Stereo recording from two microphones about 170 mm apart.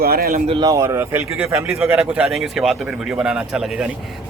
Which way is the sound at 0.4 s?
25° right (ahead or behind).